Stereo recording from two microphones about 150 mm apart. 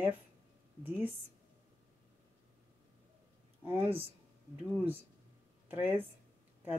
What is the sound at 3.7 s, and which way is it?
Speech, 15° right (ahead or behind).